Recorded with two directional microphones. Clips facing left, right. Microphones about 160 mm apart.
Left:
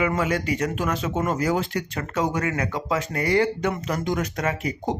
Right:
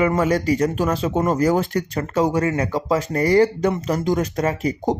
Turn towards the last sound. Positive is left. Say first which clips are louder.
# right 5 dB
turn(degrees=-35)  # may be behind; listen again after turning